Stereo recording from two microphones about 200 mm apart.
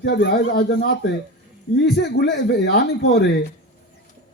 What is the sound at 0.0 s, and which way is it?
Speech, 55° left (ahead or behind).